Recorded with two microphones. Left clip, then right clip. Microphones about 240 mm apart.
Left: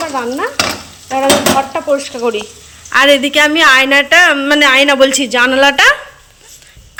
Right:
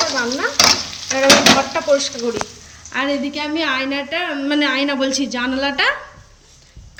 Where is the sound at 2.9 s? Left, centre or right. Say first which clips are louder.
Left 13 dB; centre.